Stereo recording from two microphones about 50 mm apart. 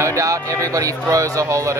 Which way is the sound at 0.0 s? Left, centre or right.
Right.